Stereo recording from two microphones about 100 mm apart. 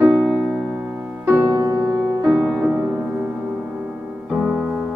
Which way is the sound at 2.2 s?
10° right (ahead or behind).